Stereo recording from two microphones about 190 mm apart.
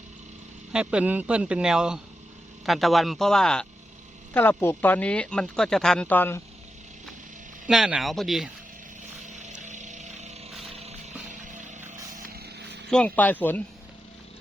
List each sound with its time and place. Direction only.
0.7 s speech: 5° right (ahead or behind); by 6.4 s 10° left (ahead or behind)
7.7 s speech: centre (ahead or behind)
9.2 s vehicle: 40° right (ahead or behind)
10.7 s a sound: 35° right (ahead or behind)
12.4 s vehicle: 60° right (ahead or behind)
12.9 s speech: 5° left (ahead or behind)